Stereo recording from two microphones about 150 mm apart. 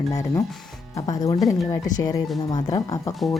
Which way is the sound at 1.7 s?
25° left (ahead or behind).